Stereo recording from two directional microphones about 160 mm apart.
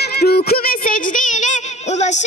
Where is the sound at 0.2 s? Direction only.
75° left (ahead or behind).